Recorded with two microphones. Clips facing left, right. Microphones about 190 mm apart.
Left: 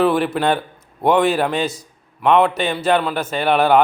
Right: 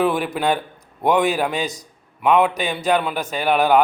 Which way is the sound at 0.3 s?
5° right (ahead or behind).